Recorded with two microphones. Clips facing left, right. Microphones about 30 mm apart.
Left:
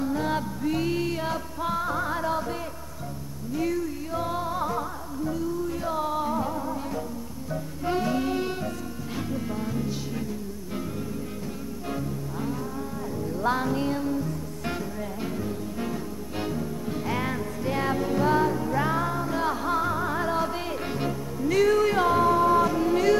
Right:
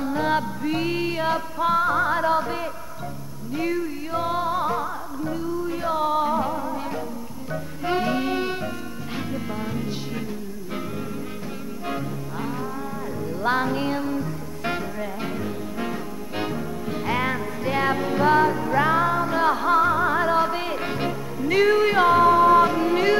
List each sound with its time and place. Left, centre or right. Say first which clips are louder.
0.0 s music: right 4 dB; right
11.9 s music: right 2 dB; right